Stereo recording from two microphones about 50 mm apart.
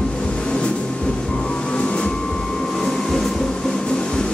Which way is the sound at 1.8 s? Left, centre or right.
Left.